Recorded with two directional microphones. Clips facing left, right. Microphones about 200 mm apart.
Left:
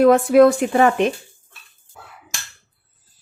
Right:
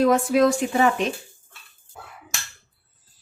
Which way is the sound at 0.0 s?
60° left (ahead or behind).